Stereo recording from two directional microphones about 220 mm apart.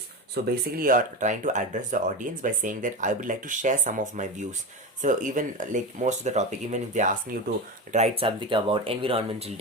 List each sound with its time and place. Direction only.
0.4 s speech: 50° right (ahead or behind)
0.8 s speech: 40° right (ahead or behind)
7.9 s speech: 30° right (ahead or behind)